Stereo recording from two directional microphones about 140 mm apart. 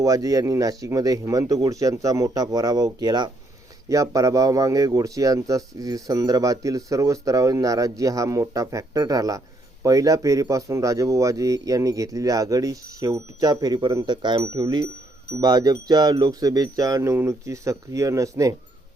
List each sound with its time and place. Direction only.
0.0 s a man's voice: 25° right (ahead or behind)